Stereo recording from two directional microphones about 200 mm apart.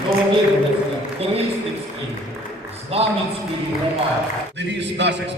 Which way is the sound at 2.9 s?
30° right (ahead or behind).